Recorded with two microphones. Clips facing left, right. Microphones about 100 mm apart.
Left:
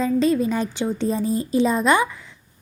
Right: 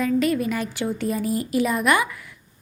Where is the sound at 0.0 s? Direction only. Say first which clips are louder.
Left 2 dB; 25° left (ahead or behind).